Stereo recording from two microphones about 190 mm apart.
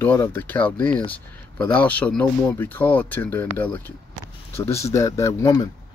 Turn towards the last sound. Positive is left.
turn(degrees=20)  # may be behind; listen again after turning